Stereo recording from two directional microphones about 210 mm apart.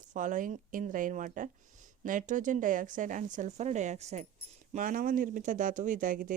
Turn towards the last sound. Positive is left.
turn(degrees=-40)  # may be behind; listen again after turning